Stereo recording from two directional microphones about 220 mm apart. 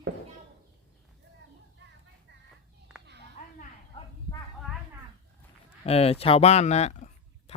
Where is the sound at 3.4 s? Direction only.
35° left (ahead or behind).